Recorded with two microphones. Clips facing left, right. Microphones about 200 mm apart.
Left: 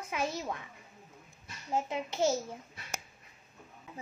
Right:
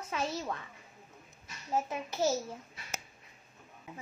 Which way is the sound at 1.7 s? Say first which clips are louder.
Left 1 dB; 25° left (ahead or behind).